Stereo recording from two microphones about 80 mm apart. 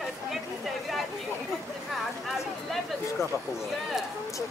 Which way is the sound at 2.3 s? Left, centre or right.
Centre.